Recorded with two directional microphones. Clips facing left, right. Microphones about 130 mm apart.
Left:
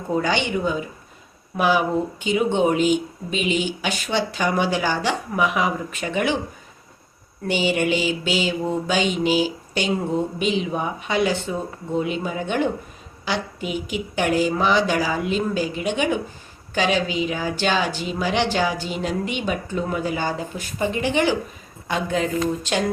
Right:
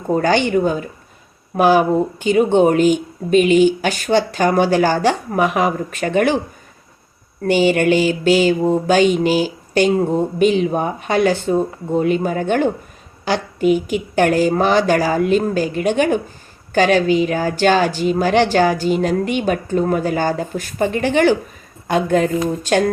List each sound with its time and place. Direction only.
0.1 s speech: 45° right (ahead or behind)
7.4 s speech: 50° right (ahead or behind)